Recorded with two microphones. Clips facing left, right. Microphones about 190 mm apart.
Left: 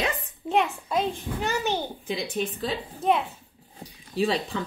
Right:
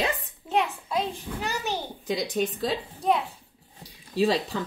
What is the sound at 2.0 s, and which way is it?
Speech, 40° right (ahead or behind).